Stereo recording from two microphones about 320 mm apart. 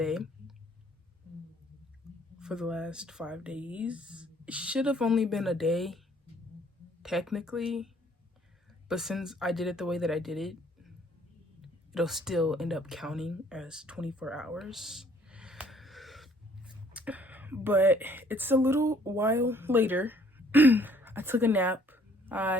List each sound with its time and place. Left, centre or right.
0.0 s clicking: centre
2.4 s speech: centre
7.0 s speech: centre
8.9 s speech: centre